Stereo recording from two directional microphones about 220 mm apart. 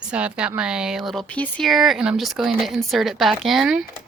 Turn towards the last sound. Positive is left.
turn(degrees=0)  # may be behind; listen again after turning